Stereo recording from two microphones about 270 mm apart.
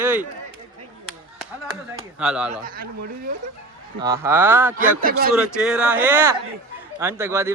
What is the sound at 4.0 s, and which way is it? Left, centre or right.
Speech, centre.